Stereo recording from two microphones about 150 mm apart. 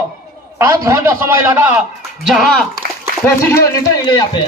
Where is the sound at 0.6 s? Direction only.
20° right (ahead or behind).